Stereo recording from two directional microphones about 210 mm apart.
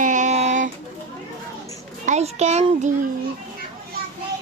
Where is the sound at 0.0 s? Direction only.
35° right (ahead or behind).